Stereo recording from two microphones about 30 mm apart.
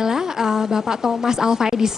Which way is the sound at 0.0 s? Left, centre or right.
Centre.